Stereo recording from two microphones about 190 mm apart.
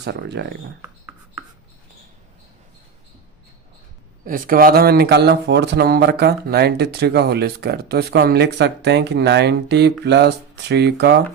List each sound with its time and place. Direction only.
0.0 s speech: 60° right (ahead or behind)
4.3 s speech: 50° right (ahead or behind)